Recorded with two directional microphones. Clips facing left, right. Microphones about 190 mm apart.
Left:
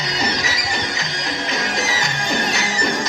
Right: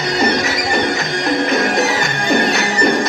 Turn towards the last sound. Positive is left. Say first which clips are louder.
# right 7 dB
turn(degrees=-60)  # may be behind; listen again after turning